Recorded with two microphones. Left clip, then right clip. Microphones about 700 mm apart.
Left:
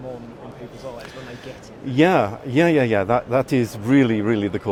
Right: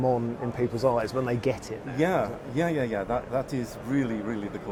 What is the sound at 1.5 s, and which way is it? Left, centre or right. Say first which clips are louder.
Speech: right 9 dB; right.